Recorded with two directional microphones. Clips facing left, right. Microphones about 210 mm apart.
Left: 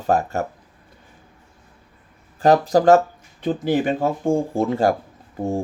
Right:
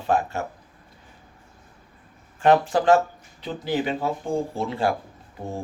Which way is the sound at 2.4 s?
40° left (ahead or behind).